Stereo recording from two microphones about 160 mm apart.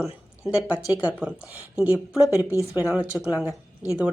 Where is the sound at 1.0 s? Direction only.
10° right (ahead or behind).